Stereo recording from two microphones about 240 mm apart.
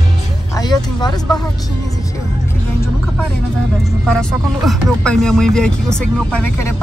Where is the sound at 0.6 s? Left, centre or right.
Centre.